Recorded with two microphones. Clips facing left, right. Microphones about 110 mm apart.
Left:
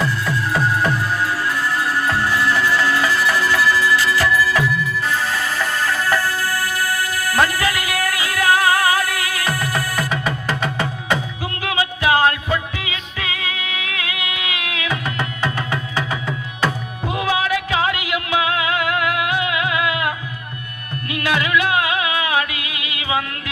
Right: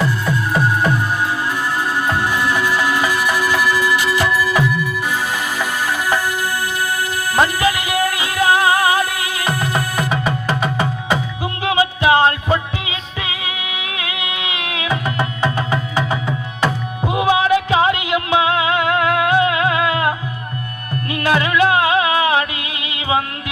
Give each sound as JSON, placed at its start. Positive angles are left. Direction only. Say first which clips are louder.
{"t": 0.0, "sound": "music", "louder": "right 2 dB", "side_deg": -15}